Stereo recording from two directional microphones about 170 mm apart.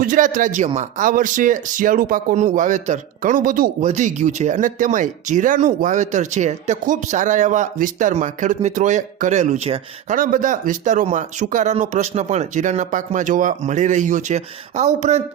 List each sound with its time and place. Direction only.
0.0 s speech: 50° right (ahead or behind)
10.2 s speech: 50° right (ahead or behind)